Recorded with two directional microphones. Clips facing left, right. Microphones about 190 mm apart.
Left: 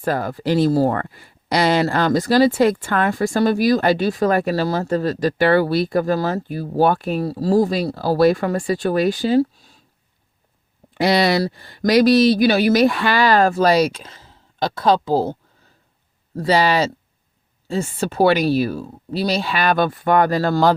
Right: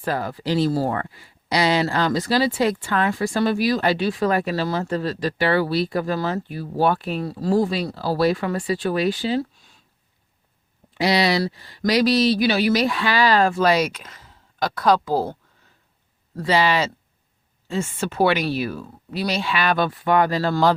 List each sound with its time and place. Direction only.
0.0 s speech: 45° left (ahead or behind)
10.9 s speech: 50° left (ahead or behind); by 15.4 s 25° left (ahead or behind)
16.4 s speech: 40° left (ahead or behind)